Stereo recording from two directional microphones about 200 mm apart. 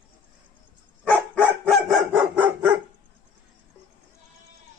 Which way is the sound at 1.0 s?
5° left (ahead or behind).